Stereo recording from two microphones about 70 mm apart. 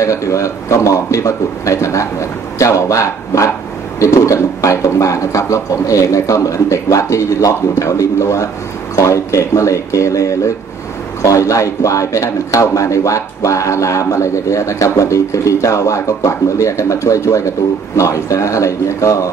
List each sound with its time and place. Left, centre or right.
0.0 s a man's voice: left